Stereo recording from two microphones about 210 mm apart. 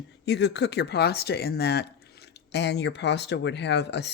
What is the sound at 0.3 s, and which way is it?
Speech, 55° left (ahead or behind).